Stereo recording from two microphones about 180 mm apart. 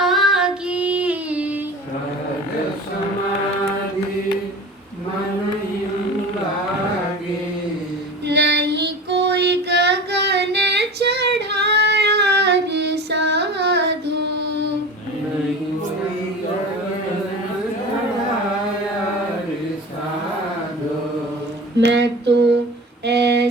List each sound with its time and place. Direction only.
0.0 s singing: centre (ahead or behind)
8.3 s child singing: 70° right (ahead or behind)
21.8 s female singing: 75° right (ahead or behind)
23.0 s a sound: 70° right (ahead or behind)